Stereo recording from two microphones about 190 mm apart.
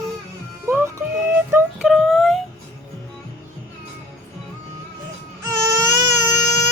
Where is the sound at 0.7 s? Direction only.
10° right (ahead or behind).